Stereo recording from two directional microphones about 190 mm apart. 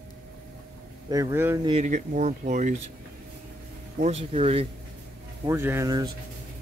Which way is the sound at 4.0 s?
35° right (ahead or behind).